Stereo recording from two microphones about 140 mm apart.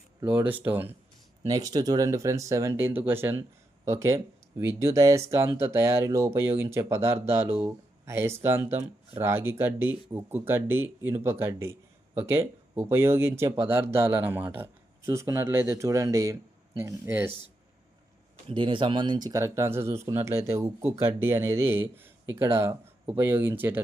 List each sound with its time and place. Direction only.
0.3 s speech: 10° right (ahead or behind)
1.5 s speech: 25° right (ahead or behind)
18.4 s speech: 35° right (ahead or behind); by 23.8 s 15° right (ahead or behind)